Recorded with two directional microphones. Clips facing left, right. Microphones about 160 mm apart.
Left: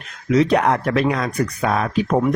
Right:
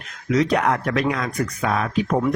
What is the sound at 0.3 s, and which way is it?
Speech, 30° left (ahead or behind).